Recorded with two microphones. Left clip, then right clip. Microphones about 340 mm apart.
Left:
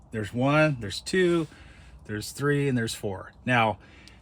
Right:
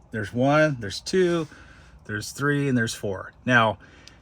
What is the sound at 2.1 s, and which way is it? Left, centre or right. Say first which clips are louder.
Speech: right 2 dB; right.